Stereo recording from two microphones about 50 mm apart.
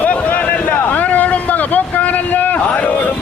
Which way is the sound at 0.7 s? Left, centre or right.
Left.